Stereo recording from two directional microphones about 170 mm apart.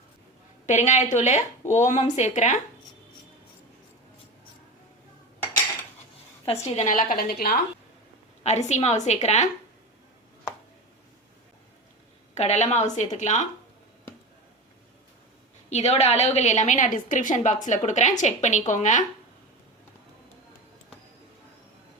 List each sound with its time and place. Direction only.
0.7 s a woman's voice: 40° left (ahead or behind)
6.4 s a woman's voice: 35° left (ahead or behind); by 7.6 s 60° left (ahead or behind)
8.4 s a woman's voice: 40° left (ahead or behind)
12.3 s a woman's voice: 40° left (ahead or behind)
15.7 s a woman's voice: 40° left (ahead or behind)